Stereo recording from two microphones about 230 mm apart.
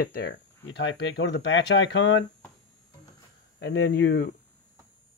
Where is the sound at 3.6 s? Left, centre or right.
Left.